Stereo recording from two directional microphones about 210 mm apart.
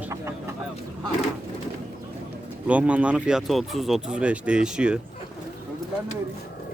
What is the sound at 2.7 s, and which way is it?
Speech, 5° right (ahead or behind).